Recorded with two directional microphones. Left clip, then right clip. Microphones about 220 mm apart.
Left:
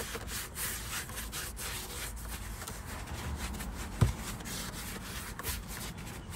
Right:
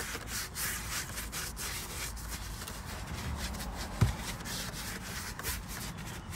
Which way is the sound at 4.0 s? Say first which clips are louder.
Left 1 dB; 15° left (ahead or behind).